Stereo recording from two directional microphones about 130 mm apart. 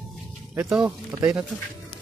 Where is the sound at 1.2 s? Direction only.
25° right (ahead or behind).